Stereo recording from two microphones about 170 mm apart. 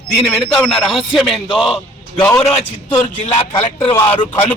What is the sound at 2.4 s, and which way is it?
A man's voice, 35° left (ahead or behind).